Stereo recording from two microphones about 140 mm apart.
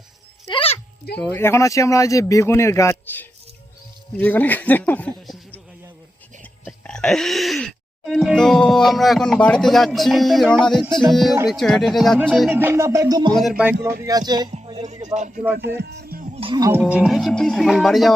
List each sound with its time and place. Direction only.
0.4 s a sound: 40° left (ahead or behind)
1.1 s speech: 10° left (ahead or behind)
6.4 s speech: 5° left (ahead or behind)
12.3 s music: 10° right (ahead or behind); by 13.3 s 25° right (ahead or behind)
13.3 s speech: centre (ahead or behind)
14.0 s music: 30° right (ahead or behind)
14.8 s speech: 55° right (ahead or behind)
16.3 s music: 40° right (ahead or behind)
16.6 s music: 20° right (ahead or behind)
16.8 s speech: 5° right (ahead or behind)